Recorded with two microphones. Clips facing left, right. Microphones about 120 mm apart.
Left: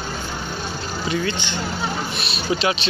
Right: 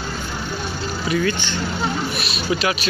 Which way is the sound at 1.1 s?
30° left (ahead or behind).